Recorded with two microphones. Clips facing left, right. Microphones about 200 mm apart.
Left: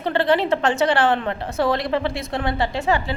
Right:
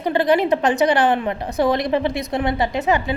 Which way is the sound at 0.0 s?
15° right (ahead or behind).